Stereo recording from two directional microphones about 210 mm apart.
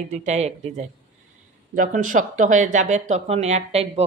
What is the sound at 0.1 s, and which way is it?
Speech, 35° right (ahead or behind).